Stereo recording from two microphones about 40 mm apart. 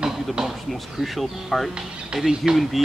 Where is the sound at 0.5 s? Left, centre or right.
Centre.